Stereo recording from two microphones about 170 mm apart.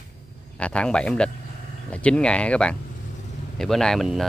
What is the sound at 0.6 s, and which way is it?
Speech, 5° left (ahead or behind).